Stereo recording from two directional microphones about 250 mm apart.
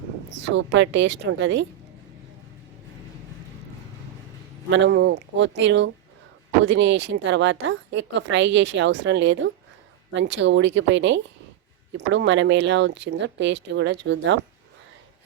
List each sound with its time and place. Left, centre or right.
0.3 s a woman's voice: right
4.7 s a woman's voice: right